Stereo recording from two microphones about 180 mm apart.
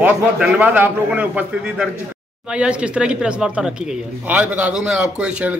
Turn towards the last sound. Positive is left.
turn(degrees=-5)  # may be behind; listen again after turning